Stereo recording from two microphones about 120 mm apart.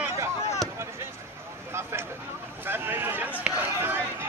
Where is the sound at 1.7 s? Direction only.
20° right (ahead or behind).